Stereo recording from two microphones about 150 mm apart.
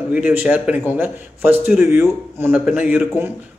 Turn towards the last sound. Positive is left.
turn(degrees=-10)  # may be behind; listen again after turning